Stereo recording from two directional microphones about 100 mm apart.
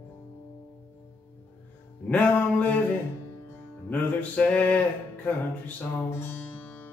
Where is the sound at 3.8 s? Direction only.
15° left (ahead or behind).